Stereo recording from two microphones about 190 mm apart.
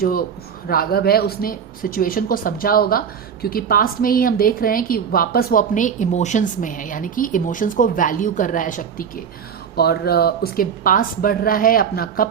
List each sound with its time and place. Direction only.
0.0 s a woman's voice: 50° left (ahead or behind)
9.7 s a woman's voice: 60° left (ahead or behind)